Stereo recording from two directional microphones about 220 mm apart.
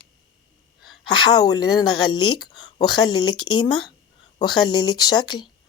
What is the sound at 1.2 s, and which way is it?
Speech, 20° left (ahead or behind).